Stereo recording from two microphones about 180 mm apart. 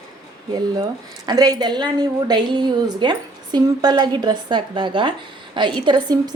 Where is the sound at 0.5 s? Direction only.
25° right (ahead or behind).